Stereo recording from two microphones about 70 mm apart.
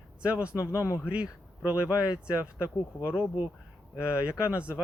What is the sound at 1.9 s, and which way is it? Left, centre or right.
Speech, left.